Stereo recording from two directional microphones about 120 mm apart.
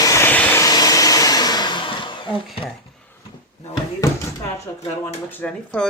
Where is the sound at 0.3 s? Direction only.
15° left (ahead or behind).